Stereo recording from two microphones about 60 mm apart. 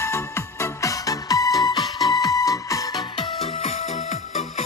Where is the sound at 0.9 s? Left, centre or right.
Left.